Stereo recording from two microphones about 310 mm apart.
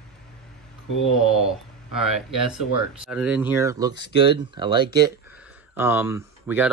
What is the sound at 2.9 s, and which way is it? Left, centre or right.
Speech, centre.